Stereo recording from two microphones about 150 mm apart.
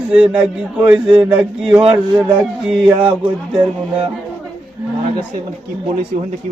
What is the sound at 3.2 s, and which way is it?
Speech, 10° right (ahead or behind).